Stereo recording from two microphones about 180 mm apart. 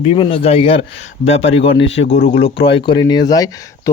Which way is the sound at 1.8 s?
90° left.